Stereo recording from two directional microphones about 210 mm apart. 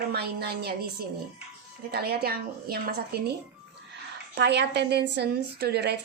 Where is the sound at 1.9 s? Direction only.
50° right (ahead or behind).